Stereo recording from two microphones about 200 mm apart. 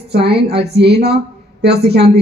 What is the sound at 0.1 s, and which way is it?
A woman's voice, 55° right (ahead or behind).